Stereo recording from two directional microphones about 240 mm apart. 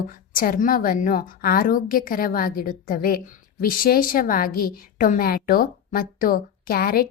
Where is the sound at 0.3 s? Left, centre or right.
Left.